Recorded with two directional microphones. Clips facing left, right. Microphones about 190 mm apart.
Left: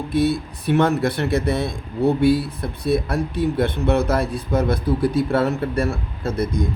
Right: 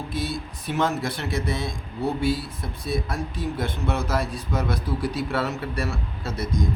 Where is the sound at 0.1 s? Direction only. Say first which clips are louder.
Left 14 dB; 60° left (ahead or behind).